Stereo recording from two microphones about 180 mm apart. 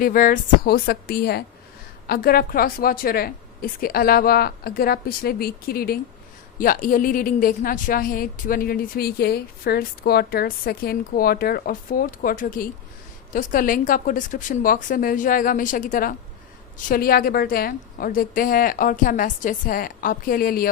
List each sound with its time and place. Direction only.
0.0 s a woman's voice: 50° left (ahead or behind)